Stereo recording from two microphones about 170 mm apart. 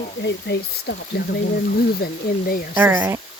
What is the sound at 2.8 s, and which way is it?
Speech, 10° right (ahead or behind).